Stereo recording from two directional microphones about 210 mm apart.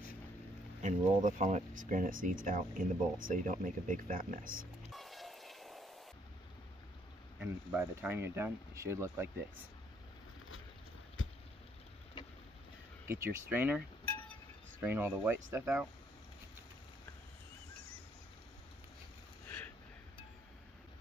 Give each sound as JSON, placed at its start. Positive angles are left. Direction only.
{"t": 0.8, "sound": "speech", "side_deg": -35}
{"t": 4.9, "sound": "train", "side_deg": 0}
{"t": 7.3, "sound": "speech", "side_deg": -5}
{"t": 11.2, "sound": "vehicle", "side_deg": 70}
{"t": 13.1, "sound": "speech", "side_deg": -10}
{"t": 19.4, "sound": "a sound", "side_deg": 10}